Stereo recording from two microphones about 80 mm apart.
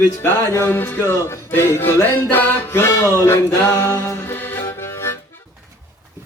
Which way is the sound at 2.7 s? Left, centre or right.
Left.